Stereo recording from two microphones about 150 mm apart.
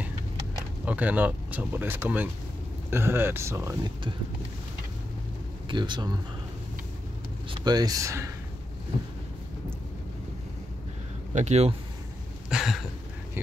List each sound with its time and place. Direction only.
0.8 s speech: 10° right (ahead or behind)
5.7 s speech: 30° right (ahead or behind)
7.4 s speech: 30° right (ahead or behind)
11.3 s speech: 45° right (ahead or behind)
12.4 s a sound: centre (ahead or behind)